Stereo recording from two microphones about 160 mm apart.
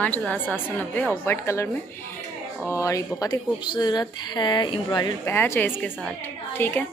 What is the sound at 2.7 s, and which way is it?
A woman's voice, 20° left (ahead or behind).